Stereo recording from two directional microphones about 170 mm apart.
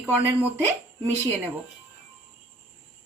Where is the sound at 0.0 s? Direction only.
10° right (ahead or behind).